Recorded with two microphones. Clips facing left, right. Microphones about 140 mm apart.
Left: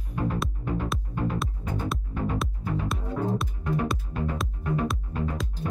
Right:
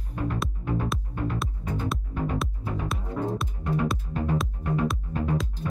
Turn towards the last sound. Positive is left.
turn(degrees=0)  # may be behind; listen again after turning